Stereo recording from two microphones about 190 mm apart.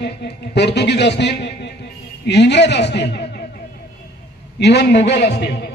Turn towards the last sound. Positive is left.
turn(degrees=60)  # may be behind; listen again after turning